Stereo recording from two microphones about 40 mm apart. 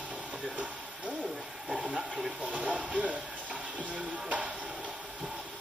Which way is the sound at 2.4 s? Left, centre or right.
Right.